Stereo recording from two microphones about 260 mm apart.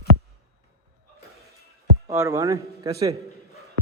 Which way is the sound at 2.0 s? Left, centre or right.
Centre.